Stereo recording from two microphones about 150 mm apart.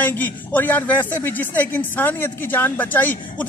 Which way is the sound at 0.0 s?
10° left (ahead or behind).